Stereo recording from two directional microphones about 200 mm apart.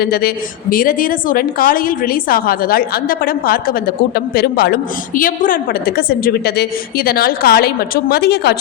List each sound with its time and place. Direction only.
0.0 s a woman's voice: 50° left (ahead or behind)